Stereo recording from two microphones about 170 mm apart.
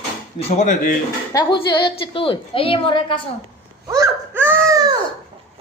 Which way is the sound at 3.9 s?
15° right (ahead or behind).